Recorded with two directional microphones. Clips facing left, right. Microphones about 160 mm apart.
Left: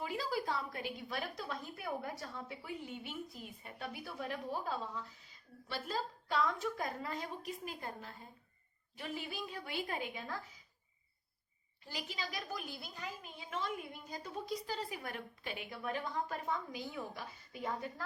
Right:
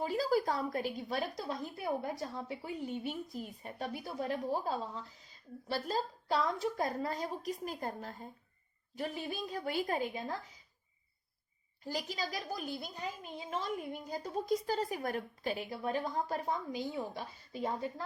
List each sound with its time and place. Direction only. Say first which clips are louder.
0.0 s a woman's voice: right 7 dB; 40° right (ahead or behind)
9.5 s a woman's voice: right 9 dB; 40° right (ahead or behind)
11.9 s a woman's voice: right 6 dB; 40° right (ahead or behind)
14.1 s a woman's voice: right 8 dB; 40° right (ahead or behind)